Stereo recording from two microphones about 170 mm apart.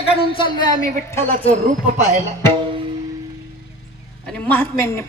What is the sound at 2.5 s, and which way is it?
Music, 30° right (ahead or behind).